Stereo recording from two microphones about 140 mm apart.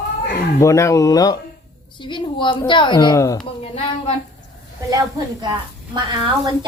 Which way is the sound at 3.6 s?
45° left (ahead or behind).